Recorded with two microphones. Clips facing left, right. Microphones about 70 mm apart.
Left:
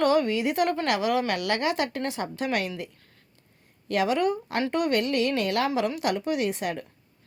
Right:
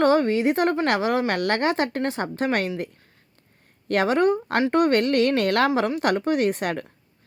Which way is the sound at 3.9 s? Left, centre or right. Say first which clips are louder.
Right 4 dB; right.